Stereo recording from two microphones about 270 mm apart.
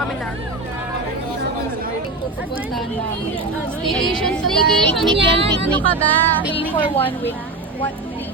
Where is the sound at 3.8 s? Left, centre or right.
Centre.